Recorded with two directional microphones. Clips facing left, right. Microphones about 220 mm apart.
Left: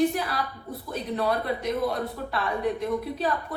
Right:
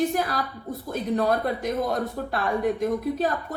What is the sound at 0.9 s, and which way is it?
A woman's voice, 45° right (ahead or behind).